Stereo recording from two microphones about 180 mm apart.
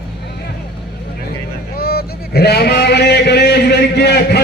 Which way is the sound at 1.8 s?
60° left (ahead or behind).